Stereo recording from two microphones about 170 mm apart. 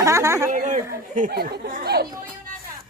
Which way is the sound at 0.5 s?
50° right (ahead or behind).